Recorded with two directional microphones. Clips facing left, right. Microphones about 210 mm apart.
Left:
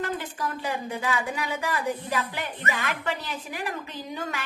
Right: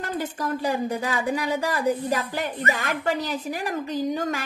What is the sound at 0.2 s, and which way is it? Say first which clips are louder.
A woman's voice: right 5 dB; 40° right (ahead or behind).